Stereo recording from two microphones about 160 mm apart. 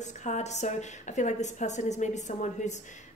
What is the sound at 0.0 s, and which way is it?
A woman's voice, 45° left (ahead or behind).